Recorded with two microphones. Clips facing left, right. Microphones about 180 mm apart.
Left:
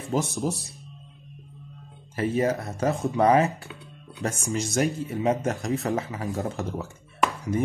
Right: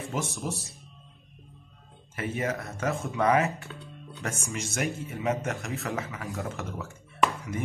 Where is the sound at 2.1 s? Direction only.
35° left (ahead or behind).